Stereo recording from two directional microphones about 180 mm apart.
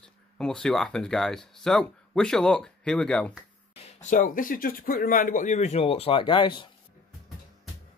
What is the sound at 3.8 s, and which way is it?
Speech, 45° left (ahead or behind).